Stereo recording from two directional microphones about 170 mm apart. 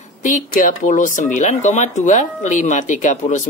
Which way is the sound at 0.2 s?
50° left (ahead or behind).